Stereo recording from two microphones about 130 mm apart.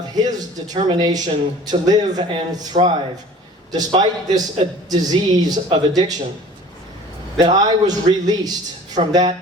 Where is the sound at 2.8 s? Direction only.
65° right (ahead or behind).